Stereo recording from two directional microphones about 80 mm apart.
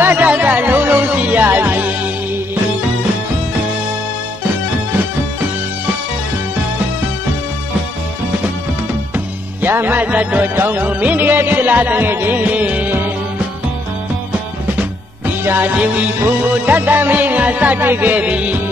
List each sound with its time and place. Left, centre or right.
0.0 s music: right
9.1 s music: right
15.4 s music: right